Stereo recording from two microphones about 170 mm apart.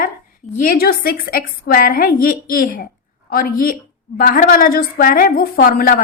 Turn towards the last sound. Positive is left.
turn(degrees=55)  # may be behind; listen again after turning